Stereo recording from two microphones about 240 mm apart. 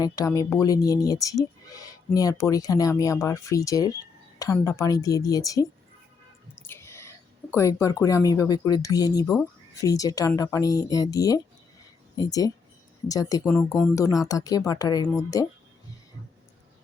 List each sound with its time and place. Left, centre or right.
0.0 s speech: centre